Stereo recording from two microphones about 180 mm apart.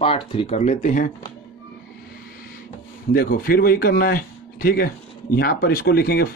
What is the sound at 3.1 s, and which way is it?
A man's voice, 55° left (ahead or behind).